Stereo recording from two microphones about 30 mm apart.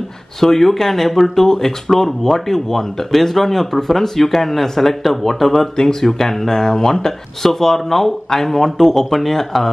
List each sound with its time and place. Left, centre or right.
0.4 s speech: centre
5.8 s speech: left
6.0 s speech: centre